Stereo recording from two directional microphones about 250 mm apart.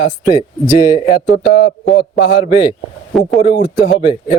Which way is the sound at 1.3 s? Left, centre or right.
Left.